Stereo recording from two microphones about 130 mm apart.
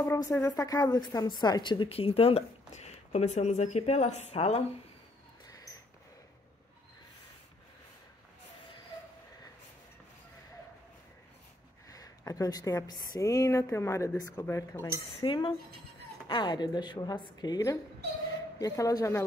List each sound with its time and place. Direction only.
0.0 s a woman's voice: 25° left (ahead or behind); by 4.6 s 50° left (ahead or behind)
5.5 s a sound: 25° left (ahead or behind)
11.9 s speech: 25° left (ahead or behind)
15.1 s a woman's voice: 40° left (ahead or behind)